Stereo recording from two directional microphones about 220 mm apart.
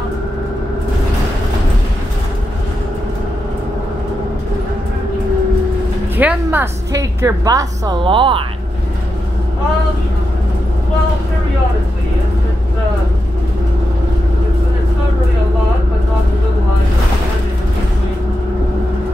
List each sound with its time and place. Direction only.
6.1 s a woman's voice: 10° right (ahead or behind)